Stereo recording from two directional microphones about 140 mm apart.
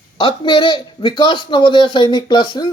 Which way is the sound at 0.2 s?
40° left (ahead or behind).